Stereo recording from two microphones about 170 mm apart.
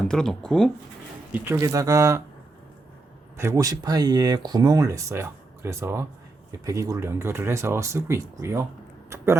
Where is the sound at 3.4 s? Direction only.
20° right (ahead or behind).